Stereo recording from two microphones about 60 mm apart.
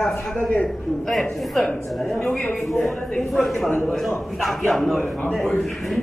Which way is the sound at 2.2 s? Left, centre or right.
Centre.